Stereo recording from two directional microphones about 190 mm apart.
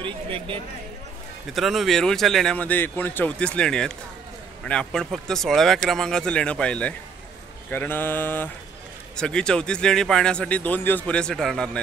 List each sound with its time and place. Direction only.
0.0 s speech: 30° right (ahead or behind)
1.5 s speech: centre (ahead or behind)
7.7 s mantra: 10° left (ahead or behind)
9.1 s speech: 5° left (ahead or behind)